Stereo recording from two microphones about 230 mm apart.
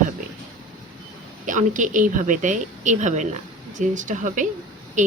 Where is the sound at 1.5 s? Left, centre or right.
Right.